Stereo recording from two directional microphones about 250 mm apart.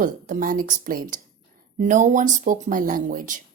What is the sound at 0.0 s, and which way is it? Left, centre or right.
A woman's voice, right.